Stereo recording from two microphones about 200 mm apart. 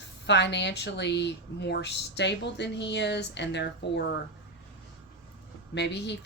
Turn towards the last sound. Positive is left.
turn(degrees=60)  # may be behind; listen again after turning